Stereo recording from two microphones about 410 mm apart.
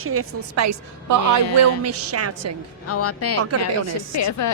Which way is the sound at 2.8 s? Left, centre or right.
Left.